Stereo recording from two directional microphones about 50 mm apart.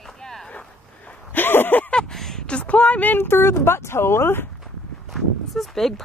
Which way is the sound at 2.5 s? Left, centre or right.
Left.